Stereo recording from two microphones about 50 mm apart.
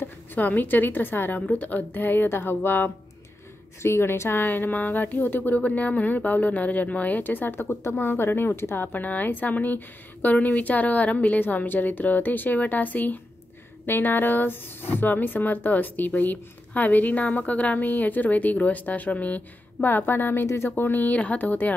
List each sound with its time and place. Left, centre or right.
0.0 s speech: left
3.8 s a woman's voice: left
4.5 s speech: left
8.0 s a woman's voice: left
8.8 s speech: left
11.4 s speech: left
17.8 s speech: left
20.4 s a woman's voice: left
20.7 s speech: left